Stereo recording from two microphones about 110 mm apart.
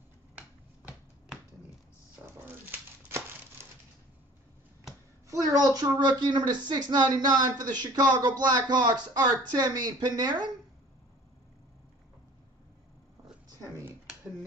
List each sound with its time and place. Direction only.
2.2 s dog: 20° right (ahead or behind)
5.3 s a woman's voice: 35° right (ahead or behind)
13.6 s a sound: 25° right (ahead or behind)